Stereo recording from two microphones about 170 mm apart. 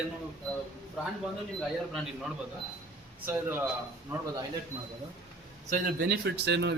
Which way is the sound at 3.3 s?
10° right (ahead or behind).